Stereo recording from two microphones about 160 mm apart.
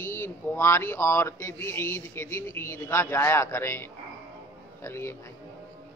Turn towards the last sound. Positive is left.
turn(degrees=15)  # may be behind; listen again after turning